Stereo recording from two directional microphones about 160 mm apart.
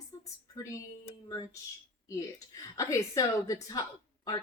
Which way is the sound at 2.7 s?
20° left (ahead or behind).